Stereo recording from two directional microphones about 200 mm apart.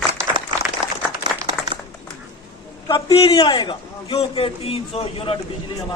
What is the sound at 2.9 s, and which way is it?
A man's voice, 25° left (ahead or behind).